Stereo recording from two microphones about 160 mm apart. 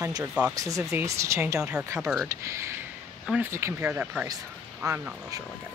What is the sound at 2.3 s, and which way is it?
Speech, 20° right (ahead or behind).